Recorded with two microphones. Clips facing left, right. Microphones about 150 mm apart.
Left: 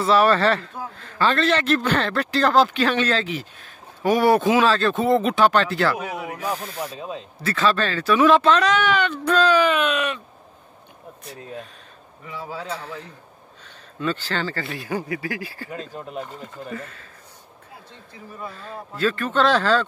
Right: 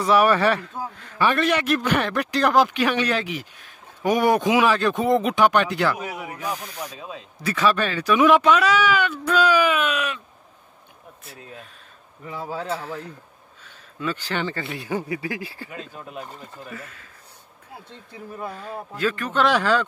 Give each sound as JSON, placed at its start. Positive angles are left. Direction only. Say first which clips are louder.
{"t": 0.0, "sound": "a man's voice", "louder": "even", "side_deg": -15}
{"t": 7.3, "sound": "a man's voice", "louder": "even", "side_deg": -15}
{"t": 12.3, "sound": "a man's voice", "louder": "right 2 dB", "side_deg": -40}
{"t": 13.7, "sound": "speech", "louder": "left 2 dB", "side_deg": -10}
{"t": 16.7, "sound": "a man's voice", "louder": "left 5 dB", "side_deg": -10}
{"t": 18.5, "sound": "a man's voice", "louder": "right 2 dB", "side_deg": -15}